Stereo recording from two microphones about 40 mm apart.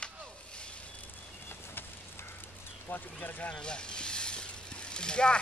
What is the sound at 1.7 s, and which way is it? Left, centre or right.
Vehicle, left.